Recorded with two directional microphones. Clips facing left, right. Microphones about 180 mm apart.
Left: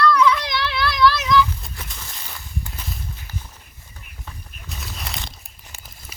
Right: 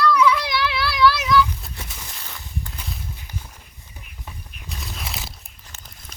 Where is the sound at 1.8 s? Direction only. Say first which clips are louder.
Even; 10° right (ahead or behind).